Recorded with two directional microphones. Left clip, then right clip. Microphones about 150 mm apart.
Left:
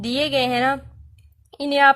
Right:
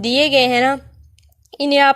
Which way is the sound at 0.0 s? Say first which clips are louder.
Right 7 dB; 35° right (ahead or behind).